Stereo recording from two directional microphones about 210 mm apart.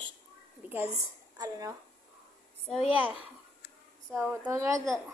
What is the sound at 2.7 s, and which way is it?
A woman's voice, 5° right (ahead or behind).